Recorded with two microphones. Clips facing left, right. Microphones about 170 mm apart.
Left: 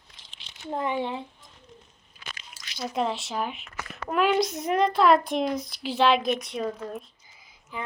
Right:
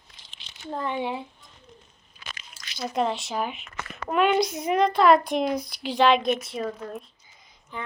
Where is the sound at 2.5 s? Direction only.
Centre (ahead or behind).